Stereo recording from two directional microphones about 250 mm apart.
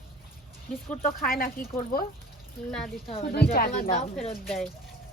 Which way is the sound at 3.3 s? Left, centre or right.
Left.